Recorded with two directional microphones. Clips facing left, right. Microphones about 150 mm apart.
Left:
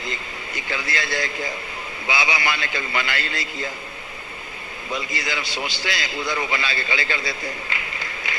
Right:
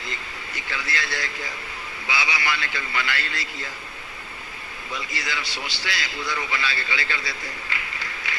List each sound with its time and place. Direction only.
0.5 s a man's voice: 20° left (ahead or behind)
4.9 s a man's voice: 20° left (ahead or behind)
7.9 s a sound: 20° left (ahead or behind)